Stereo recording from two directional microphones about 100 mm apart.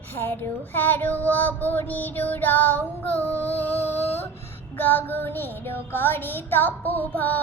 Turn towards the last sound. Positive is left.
turn(degrees=15)  # may be behind; listen again after turning